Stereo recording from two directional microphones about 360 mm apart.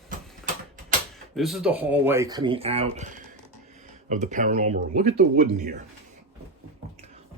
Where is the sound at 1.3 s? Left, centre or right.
Centre; by 5.8 s right.